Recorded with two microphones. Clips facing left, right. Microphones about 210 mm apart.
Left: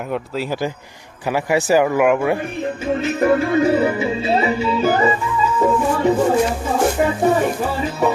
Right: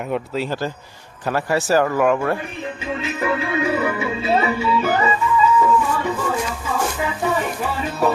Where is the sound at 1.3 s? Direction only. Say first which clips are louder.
Left 2 dB; 15° left (ahead or behind).